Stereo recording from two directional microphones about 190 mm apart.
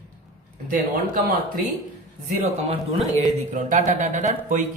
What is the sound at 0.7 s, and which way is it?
Speech, 45° right (ahead or behind).